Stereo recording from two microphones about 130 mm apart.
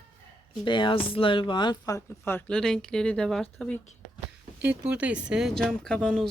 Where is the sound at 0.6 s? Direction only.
40° left (ahead or behind); by 2.4 s 20° left (ahead or behind).